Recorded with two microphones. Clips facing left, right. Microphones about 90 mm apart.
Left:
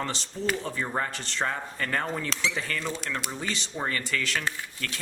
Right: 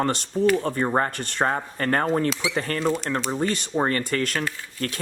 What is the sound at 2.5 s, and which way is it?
Speech, 50° right (ahead or behind).